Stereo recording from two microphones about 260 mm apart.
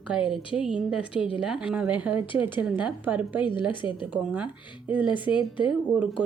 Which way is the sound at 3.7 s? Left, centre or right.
Centre.